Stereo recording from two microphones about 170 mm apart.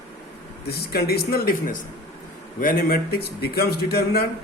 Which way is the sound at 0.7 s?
65° left (ahead or behind).